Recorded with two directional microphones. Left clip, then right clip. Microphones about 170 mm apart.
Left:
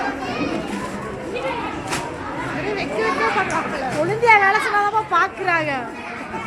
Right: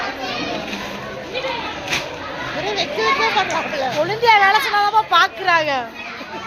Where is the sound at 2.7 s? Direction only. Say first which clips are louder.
Right 4 dB; 30° right (ahead or behind).